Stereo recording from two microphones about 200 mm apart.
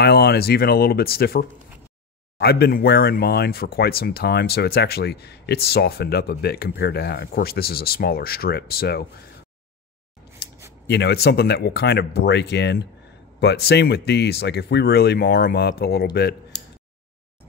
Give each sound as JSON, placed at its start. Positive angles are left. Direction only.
{"t": 0.0, "sound": "speech", "side_deg": 55}
{"t": 10.9, "sound": "speech", "side_deg": 55}